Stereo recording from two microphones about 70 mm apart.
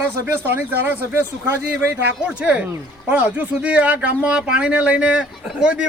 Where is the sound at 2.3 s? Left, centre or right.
Centre.